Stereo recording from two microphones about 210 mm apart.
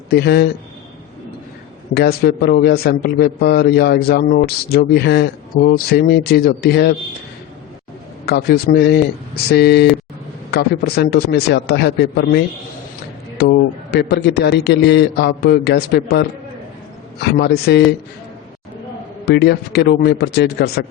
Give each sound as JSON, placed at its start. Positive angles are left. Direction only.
{"t": 0.1, "sound": "a man's voice", "side_deg": 50}
{"t": 1.9, "sound": "a man's voice", "side_deg": 50}
{"t": 8.3, "sound": "a man's voice", "side_deg": 50}
{"t": 19.2, "sound": "a man's voice", "side_deg": 50}